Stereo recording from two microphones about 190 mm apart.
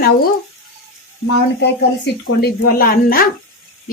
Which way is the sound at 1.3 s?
60° left (ahead or behind).